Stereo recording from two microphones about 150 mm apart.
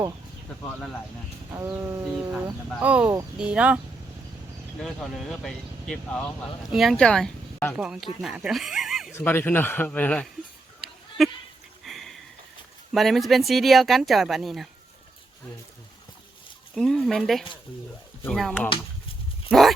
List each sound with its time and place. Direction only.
1.5 s a sound: 20° right (ahead or behind)
2.8 s speech: 10° right (ahead or behind)
4.8 s speech: centre (ahead or behind)
9.1 s a man's voice: 15° left (ahead or behind)
11.2 s speech: centre (ahead or behind)
11.9 s sniff: centre (ahead or behind)
12.9 s speech: centre (ahead or behind)
16.7 s speech: 5° left (ahead or behind)
19.5 s dog: centre (ahead or behind)